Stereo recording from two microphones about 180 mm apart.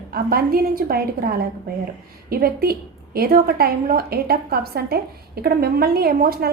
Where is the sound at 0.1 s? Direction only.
55° right (ahead or behind).